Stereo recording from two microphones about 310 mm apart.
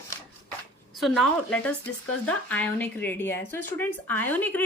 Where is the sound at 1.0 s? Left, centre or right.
Centre.